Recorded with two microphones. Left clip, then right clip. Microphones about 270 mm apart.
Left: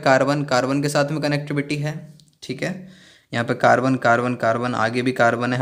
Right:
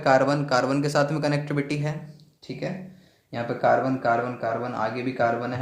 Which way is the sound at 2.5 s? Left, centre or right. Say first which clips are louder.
Left 5 dB; left.